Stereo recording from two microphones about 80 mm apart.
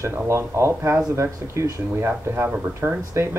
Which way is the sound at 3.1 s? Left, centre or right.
Right.